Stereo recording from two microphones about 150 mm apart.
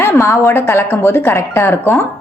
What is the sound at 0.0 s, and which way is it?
A woman's voice, 20° left (ahead or behind).